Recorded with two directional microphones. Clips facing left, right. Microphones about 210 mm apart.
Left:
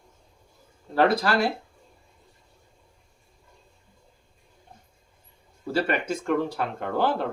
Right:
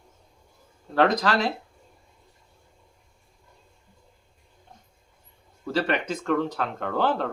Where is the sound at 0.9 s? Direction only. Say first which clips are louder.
Even; 10° left (ahead or behind).